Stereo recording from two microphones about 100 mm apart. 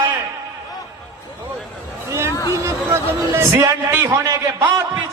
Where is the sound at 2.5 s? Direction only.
25° right (ahead or behind).